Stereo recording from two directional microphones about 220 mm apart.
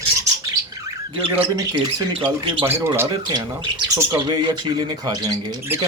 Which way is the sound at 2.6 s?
10° right (ahead or behind).